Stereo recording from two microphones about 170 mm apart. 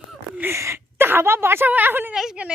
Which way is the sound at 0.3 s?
15° right (ahead or behind).